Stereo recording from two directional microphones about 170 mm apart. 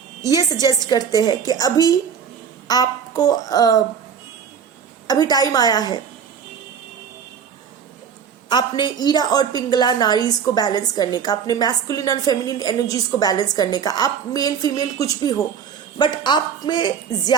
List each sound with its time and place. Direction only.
0.3 s a woman's voice: 25° left (ahead or behind)
5.0 s a woman's voice: 20° left (ahead or behind)
8.4 s a woman's voice: 25° left (ahead or behind)